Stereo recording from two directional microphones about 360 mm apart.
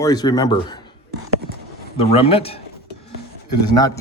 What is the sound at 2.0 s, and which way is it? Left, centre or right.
Speech, centre.